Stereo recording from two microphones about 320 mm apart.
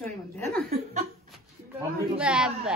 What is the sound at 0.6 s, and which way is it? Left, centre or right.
Speech, right.